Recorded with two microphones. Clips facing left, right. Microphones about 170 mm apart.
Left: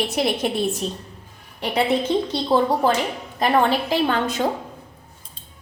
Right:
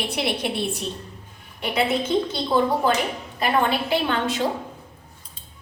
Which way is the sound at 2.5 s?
35° left (ahead or behind).